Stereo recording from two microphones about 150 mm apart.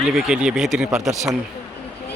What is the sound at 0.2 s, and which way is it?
Speech, 5° right (ahead or behind).